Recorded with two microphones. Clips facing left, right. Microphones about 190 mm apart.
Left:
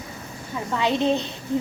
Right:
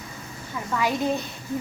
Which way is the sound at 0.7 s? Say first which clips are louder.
Left 3 dB; 25° left (ahead or behind).